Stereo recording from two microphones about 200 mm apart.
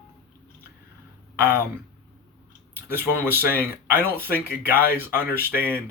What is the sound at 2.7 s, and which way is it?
Speech, 10° right (ahead or behind).